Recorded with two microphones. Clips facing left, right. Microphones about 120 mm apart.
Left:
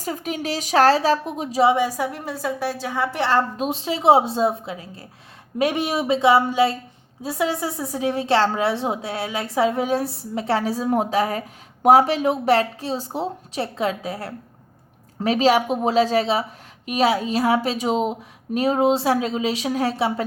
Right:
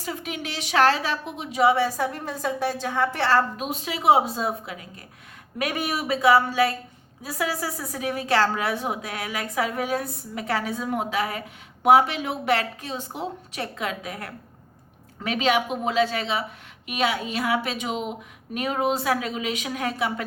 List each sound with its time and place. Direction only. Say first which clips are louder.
0.0 s a woman's voice: left 5 dB; 40° left (ahead or behind)
1.7 s a woman's voice: left 2 dB; 10° left (ahead or behind)
3.6 s a woman's voice: left 6 dB; 30° left (ahead or behind)